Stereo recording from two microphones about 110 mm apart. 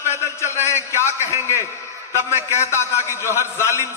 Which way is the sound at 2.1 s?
25° right (ahead or behind).